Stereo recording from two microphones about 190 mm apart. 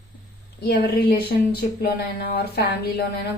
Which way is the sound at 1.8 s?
55° left (ahead or behind).